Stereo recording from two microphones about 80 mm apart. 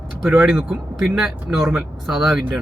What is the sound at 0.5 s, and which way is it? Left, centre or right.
A man's voice, centre.